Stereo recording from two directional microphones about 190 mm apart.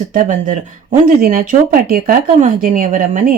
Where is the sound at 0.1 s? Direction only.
45° right (ahead or behind).